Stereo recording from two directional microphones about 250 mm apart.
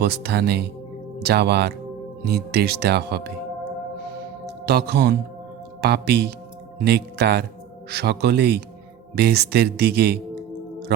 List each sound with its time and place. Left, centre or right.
0.0 s speech: right
4.6 s speech: right